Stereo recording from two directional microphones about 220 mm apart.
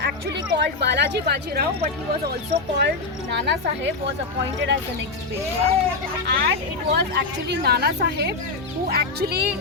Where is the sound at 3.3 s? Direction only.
50° right (ahead or behind).